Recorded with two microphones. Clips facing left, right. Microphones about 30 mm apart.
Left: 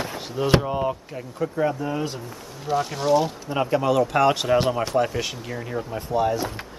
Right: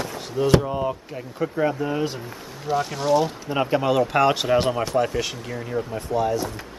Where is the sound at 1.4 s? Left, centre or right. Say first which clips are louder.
Right 1 dB; centre.